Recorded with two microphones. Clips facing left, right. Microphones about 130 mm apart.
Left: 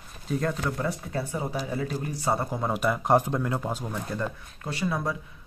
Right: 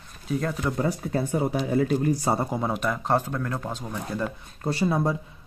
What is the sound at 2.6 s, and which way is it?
Speech, 5° left (ahead or behind).